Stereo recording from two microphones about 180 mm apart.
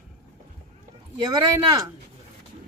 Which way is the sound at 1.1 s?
20° right (ahead or behind).